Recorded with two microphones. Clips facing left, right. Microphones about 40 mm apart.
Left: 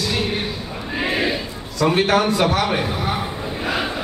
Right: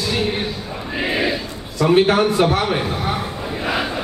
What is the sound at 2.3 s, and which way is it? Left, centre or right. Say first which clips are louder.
Speech: right 1 dB; right.